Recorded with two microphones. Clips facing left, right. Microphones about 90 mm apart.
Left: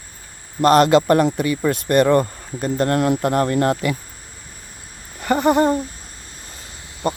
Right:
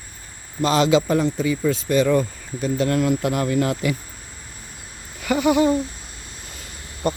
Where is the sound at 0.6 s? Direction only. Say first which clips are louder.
Left 5 dB; 55° left (ahead or behind).